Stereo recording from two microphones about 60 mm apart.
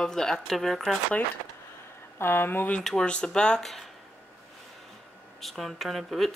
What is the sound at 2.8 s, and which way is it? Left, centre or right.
Speech, centre.